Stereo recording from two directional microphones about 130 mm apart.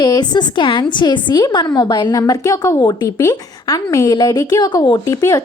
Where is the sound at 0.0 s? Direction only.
35° left (ahead or behind).